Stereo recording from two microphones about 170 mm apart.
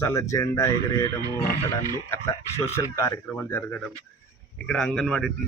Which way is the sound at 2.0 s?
15° left (ahead or behind).